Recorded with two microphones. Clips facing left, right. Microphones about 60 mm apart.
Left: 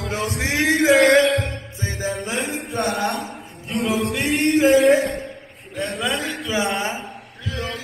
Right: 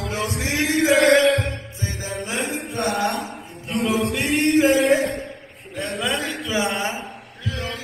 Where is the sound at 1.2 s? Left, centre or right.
Right.